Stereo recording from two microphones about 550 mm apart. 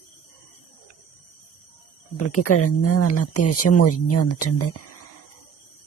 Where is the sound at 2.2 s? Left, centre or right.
Left.